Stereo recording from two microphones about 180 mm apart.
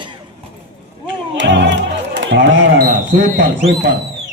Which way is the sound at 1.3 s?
85° right.